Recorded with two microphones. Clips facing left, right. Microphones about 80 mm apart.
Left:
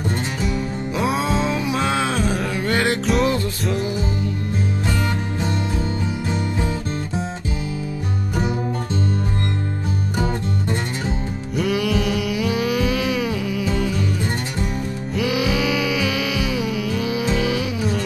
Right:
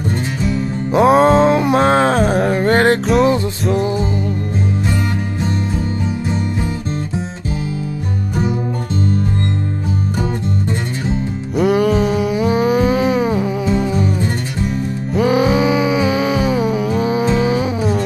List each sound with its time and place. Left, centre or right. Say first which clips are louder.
0.9 s music: right 12 dB; right
11.5 s music: right 7 dB; right
15.1 s music: right 7 dB; right